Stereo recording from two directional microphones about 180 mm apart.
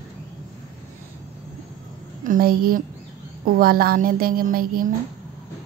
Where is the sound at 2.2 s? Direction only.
50° right (ahead or behind).